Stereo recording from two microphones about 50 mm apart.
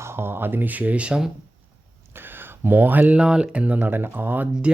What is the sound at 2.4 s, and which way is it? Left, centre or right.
Speech, right.